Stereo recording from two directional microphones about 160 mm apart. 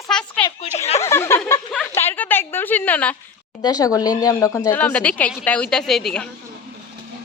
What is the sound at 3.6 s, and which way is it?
Speech, 25° left (ahead or behind).